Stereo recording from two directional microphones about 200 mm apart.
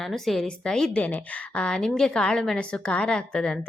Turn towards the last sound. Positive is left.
turn(degrees=5)  # may be behind; listen again after turning